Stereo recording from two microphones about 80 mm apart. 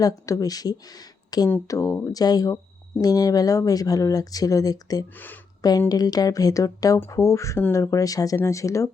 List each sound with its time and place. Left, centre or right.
0.0 s speech: left
5.1 s speech: left
5.9 s speech: left